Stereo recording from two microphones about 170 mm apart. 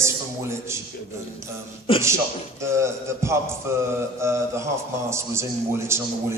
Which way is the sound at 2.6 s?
15° right (ahead or behind).